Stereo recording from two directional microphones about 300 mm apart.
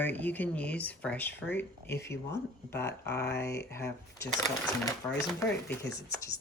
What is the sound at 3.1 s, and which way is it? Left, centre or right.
Speech, left.